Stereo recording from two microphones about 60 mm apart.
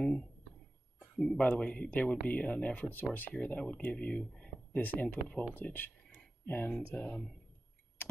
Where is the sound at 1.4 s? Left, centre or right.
Centre.